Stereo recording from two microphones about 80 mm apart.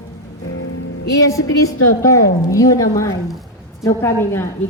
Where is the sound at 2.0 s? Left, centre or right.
Left.